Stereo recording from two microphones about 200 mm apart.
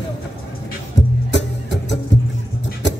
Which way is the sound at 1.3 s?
60° left (ahead or behind).